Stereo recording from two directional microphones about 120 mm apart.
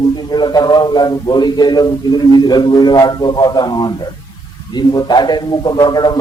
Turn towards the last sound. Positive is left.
turn(degrees=35)  # may be behind; listen again after turning